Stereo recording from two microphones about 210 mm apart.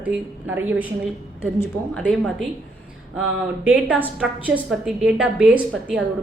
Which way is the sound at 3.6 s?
5° right (ahead or behind).